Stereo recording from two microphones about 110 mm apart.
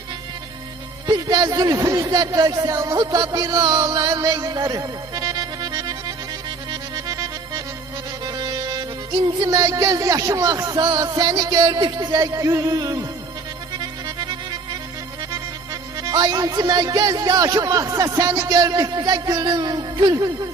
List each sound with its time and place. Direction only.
1.0 s speech: 35° right (ahead or behind)
6.9 s accordion: 35° right (ahead or behind)
8.2 s music: 40° right (ahead or behind)
9.4 s speech: 35° right (ahead or behind)
13.7 s music: 40° right (ahead or behind)
16.0 s speech: 35° right (ahead or behind)